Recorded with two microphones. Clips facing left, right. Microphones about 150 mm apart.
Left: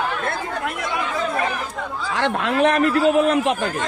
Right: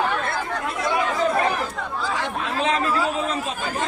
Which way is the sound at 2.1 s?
90° left.